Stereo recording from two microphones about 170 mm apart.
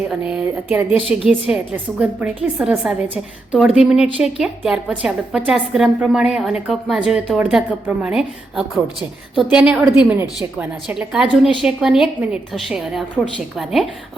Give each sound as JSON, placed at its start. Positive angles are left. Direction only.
{"t": 0.1, "sound": "a woman's voice", "side_deg": -5}